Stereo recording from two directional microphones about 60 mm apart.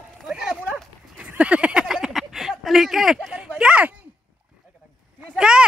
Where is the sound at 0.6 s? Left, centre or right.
Right.